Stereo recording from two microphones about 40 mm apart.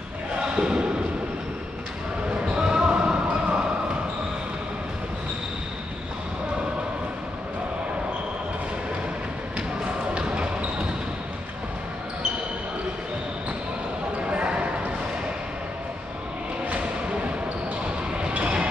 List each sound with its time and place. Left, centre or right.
0.4 s a sound: right
2.4 s basketball bounce: right
10.1 s basketball bounce: right
14.2 s clip-clop: right
16.6 s music: right
18.3 s a sound: right